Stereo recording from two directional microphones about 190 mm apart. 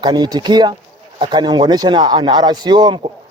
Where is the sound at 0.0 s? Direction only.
20° right (ahead or behind).